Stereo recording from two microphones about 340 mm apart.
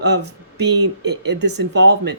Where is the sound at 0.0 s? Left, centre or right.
Right.